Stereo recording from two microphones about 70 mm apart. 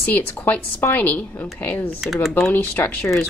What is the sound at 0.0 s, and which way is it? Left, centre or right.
Speech, left.